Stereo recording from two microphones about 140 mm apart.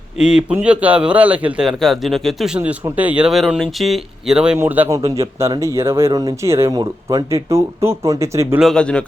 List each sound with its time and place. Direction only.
0.2 s a man's voice: 5° right (ahead or behind)
4.5 s speech: 15° right (ahead or behind)
8.7 s speech: 5° left (ahead or behind)